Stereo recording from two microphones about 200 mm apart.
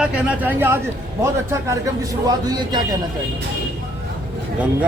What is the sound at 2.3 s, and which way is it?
Speech, 20° right (ahead or behind).